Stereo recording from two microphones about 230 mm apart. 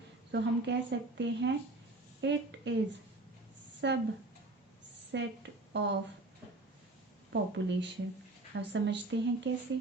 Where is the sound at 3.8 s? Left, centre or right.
Right.